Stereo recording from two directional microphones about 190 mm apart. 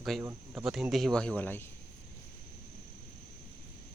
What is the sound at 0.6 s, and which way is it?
Speech, centre (ahead or behind).